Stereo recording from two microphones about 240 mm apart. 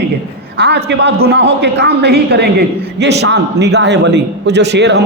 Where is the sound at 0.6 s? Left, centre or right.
Right.